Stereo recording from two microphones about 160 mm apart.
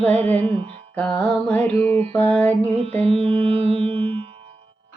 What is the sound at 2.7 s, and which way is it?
Music, 35° right (ahead or behind).